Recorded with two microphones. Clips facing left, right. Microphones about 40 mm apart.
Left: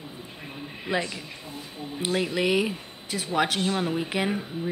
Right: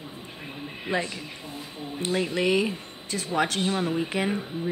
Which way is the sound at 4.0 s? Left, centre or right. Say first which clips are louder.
Even; left.